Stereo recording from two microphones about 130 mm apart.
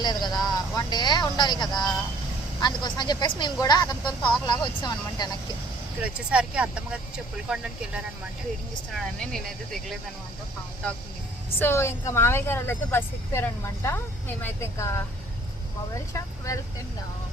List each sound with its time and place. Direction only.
0.0 s vehicle: 35° left (ahead or behind)
2.6 s speech: 35° left (ahead or behind)
6.0 s speech: 10° right (ahead or behind)
9.2 s speech: 5° left (ahead or behind)
11.6 s speech: 20° left (ahead or behind)